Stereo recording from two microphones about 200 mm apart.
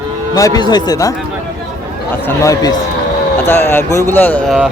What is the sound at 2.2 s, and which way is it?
Speech, 15° left (ahead or behind).